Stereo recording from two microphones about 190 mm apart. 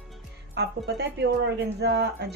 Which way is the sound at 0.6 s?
60° right (ahead or behind).